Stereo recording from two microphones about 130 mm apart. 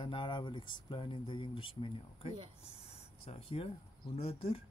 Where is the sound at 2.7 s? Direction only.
50° left (ahead or behind).